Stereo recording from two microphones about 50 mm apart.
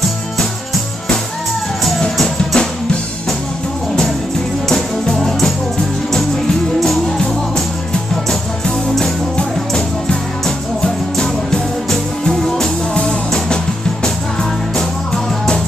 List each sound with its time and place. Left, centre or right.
2.1 s music: centre
5.0 s music: centre
6.8 s music: centre